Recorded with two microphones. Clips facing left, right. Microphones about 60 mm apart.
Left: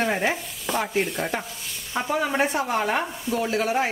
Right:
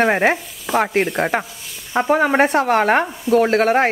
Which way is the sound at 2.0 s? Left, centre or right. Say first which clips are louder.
Right 8 dB; right.